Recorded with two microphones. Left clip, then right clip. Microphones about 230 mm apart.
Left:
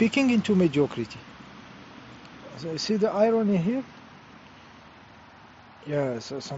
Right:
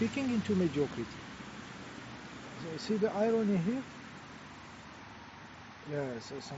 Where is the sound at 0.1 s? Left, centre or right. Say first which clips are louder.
Left 10 dB; left.